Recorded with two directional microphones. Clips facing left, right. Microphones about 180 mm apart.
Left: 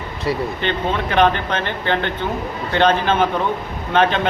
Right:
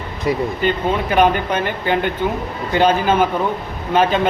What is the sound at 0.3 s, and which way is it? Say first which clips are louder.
A man's voice: right 3 dB; 20° right (ahead or behind).